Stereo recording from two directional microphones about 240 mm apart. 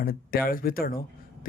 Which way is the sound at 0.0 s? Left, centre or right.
Left.